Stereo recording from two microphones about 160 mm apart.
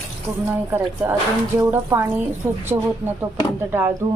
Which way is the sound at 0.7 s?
10° right (ahead or behind).